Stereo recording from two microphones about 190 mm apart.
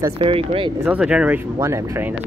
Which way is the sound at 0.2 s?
30° right (ahead or behind).